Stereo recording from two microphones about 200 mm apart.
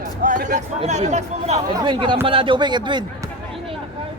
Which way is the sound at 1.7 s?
20° right (ahead or behind).